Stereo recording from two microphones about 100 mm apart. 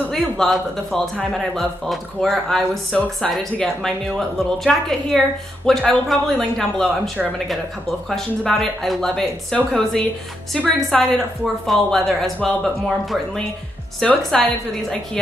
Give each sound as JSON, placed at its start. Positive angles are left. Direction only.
{"t": 0.1, "sound": "a woman's voice", "side_deg": 5}
{"t": 8.1, "sound": "a woman's voice", "side_deg": 5}